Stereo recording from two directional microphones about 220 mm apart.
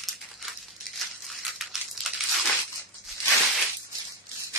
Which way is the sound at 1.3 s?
Centre (ahead or behind).